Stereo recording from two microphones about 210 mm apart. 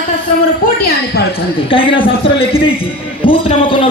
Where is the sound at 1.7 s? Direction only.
25° left (ahead or behind).